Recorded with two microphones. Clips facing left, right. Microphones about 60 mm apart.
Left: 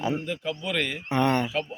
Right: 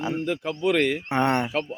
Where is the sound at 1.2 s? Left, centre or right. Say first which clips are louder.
Even; right.